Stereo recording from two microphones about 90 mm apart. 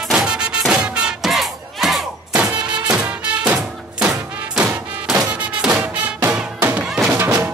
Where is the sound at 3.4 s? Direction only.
10° right (ahead or behind).